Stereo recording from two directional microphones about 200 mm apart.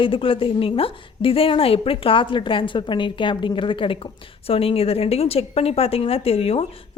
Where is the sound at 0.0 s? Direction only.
25° left (ahead or behind).